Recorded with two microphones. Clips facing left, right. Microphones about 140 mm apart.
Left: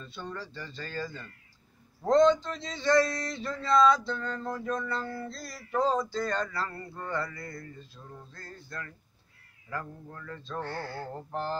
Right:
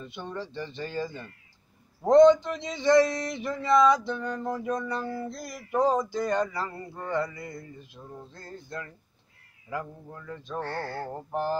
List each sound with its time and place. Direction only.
0.0 s speech: 20° right (ahead or behind)
2.0 s male singing: 15° right (ahead or behind)
10.6 s speech: 45° right (ahead or behind)
11.1 s male singing: 15° right (ahead or behind)